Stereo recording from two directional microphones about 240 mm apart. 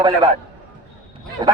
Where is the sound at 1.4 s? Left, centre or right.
Centre.